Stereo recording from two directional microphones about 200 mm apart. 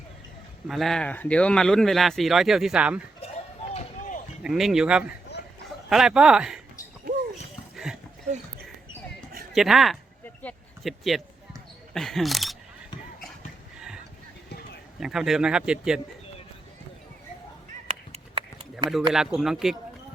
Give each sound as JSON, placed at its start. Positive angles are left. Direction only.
{"t": 0.7, "sound": "speech", "side_deg": 0}
{"t": 3.8, "sound": "run", "side_deg": 40}
{"t": 4.4, "sound": "speech", "side_deg": 0}
{"t": 9.5, "sound": "speech", "side_deg": 0}
{"t": 10.4, "sound": "a sound", "side_deg": 0}
{"t": 11.9, "sound": "speech", "side_deg": 0}
{"t": 15.0, "sound": "speech", "side_deg": 0}
{"t": 18.1, "sound": "a sound", "side_deg": -30}
{"t": 19.1, "sound": "speech", "side_deg": 0}